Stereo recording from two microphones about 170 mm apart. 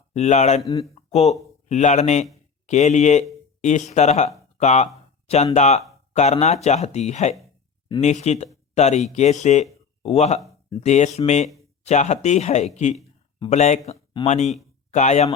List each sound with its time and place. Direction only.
0.1 s speech: 40° left (ahead or behind)
13.9 s a sound: 25° left (ahead or behind)
14.3 s speech: 40° left (ahead or behind)